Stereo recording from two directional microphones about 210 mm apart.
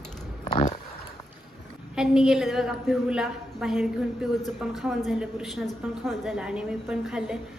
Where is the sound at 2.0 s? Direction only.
Centre (ahead or behind).